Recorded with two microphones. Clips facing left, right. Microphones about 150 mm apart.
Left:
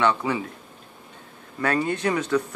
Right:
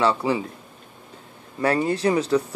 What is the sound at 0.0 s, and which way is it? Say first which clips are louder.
Speech: right 2 dB; 30° right (ahead or behind).